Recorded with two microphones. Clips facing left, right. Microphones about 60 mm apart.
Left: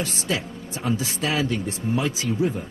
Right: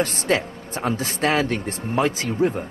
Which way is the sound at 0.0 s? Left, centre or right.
Right.